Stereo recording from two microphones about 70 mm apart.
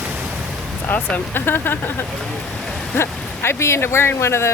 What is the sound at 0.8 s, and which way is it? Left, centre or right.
Speech, left.